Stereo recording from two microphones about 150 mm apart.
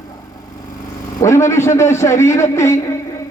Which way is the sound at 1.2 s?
20° left (ahead or behind).